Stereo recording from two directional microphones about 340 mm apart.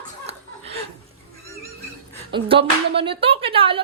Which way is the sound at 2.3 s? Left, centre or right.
Centre.